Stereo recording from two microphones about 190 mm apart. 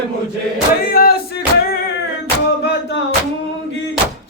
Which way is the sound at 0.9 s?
50° left (ahead or behind).